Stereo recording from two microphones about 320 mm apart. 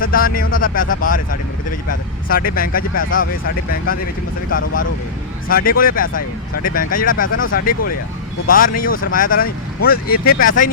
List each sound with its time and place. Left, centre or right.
0.0 s speech: left
4.5 s speech: left
6.5 s speech: left
6.7 s speech: left
7.3 s speech: left
7.6 s speech: left